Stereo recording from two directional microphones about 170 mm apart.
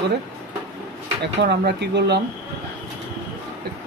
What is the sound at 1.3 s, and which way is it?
Speech, 85° right.